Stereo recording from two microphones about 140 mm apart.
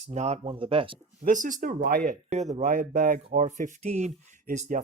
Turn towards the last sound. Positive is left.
turn(degrees=-70)  # may be behind; listen again after turning